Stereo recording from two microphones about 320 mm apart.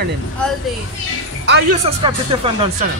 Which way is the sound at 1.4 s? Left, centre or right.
Right.